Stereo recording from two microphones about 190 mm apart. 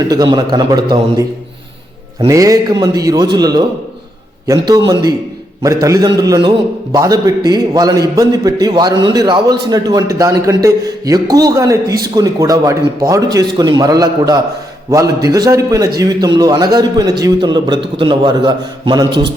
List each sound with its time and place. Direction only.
0.1 s a man's voice: 20° right (ahead or behind)
2.2 s a man's voice: 15° right (ahead or behind)
5.6 s a man's voice: 15° right (ahead or behind)